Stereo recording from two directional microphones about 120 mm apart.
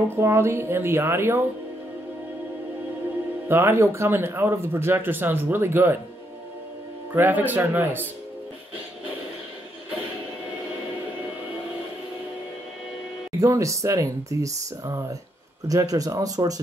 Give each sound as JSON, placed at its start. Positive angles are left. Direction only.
{"t": 0.1, "sound": "speech", "side_deg": -20}
{"t": 3.4, "sound": "speech", "side_deg": -20}
{"t": 7.2, "sound": "speech", "side_deg": -15}
{"t": 13.4, "sound": "speech", "side_deg": -25}